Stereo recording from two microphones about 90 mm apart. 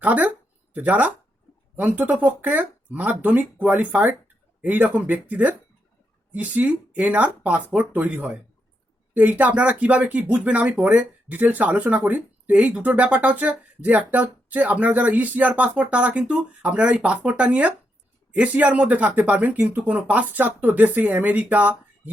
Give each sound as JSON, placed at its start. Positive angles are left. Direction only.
{"t": 0.0, "sound": "speech", "side_deg": -15}